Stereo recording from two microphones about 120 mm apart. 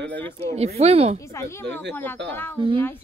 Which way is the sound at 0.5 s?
60° right (ahead or behind).